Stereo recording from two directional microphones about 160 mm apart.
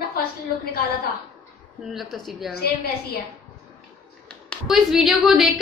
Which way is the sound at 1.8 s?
Centre (ahead or behind).